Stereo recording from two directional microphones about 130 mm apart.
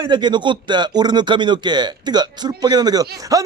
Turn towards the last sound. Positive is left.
turn(degrees=-25)  # may be behind; listen again after turning